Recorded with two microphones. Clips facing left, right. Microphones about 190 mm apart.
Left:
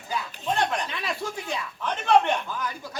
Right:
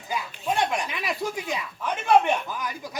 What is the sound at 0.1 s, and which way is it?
Speech, 10° right (ahead or behind).